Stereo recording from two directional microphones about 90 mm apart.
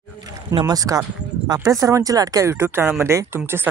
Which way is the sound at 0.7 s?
40° right (ahead or behind).